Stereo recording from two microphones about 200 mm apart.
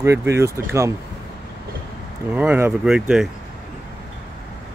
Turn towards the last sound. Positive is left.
turn(degrees=-5)  # may be behind; listen again after turning